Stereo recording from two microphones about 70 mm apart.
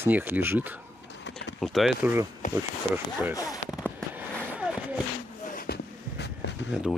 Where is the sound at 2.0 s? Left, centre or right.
Right.